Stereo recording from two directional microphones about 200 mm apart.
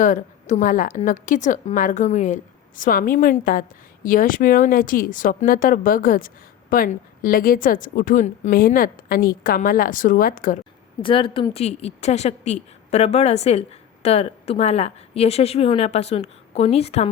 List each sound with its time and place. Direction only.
0.0 s a woman's voice: 40° left (ahead or behind)
11.0 s a woman's voice: 25° left (ahead or behind)